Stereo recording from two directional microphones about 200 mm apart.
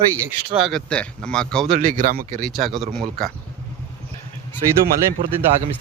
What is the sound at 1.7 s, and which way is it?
Speech, 45° right (ahead or behind).